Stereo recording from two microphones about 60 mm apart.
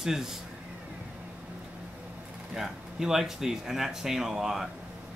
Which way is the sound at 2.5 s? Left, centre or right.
Centre.